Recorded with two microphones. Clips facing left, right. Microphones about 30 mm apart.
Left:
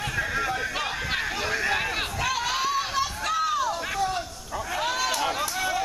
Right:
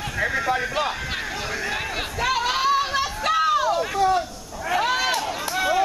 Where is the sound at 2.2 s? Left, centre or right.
Centre.